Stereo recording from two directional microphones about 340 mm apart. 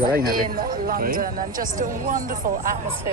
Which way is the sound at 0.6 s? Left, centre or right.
Right.